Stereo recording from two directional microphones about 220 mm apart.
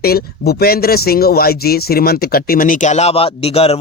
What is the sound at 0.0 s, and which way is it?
Speech, 45° left (ahead or behind).